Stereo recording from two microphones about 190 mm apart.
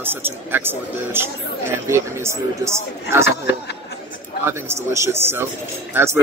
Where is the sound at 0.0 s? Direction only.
10° right (ahead or behind).